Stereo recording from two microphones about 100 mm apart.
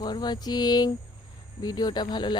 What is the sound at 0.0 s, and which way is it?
Speech, 45° left (ahead or behind).